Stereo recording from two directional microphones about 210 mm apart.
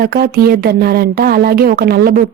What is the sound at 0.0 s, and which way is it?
A woman's voice, 45° right (ahead or behind).